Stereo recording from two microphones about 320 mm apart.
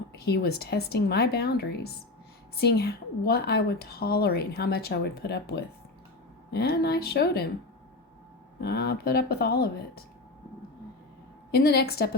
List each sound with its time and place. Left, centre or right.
0.1 s a woman's voice: left
8.6 s a woman's voice: left
11.5 s a woman's voice: left